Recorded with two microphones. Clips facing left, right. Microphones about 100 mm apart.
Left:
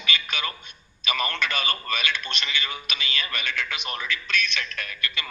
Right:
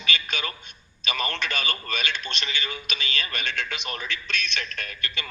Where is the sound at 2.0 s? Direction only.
35° right (ahead or behind).